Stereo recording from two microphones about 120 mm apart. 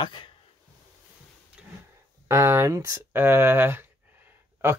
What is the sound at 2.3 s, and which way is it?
Speech, 20° right (ahead or behind).